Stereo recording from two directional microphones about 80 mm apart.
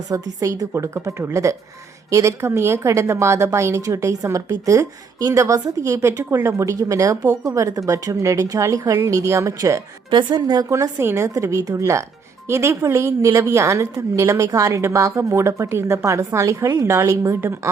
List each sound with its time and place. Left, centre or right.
0.1 s a woman's voice: right
0.7 s a woman's voice: right
10.1 s a woman's voice: right